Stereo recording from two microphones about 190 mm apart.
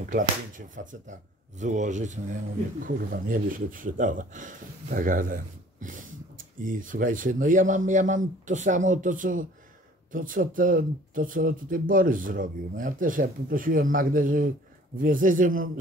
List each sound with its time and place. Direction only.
0.1 s speech: 45° right (ahead or behind)